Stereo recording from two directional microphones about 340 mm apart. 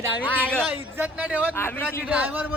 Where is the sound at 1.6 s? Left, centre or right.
Centre.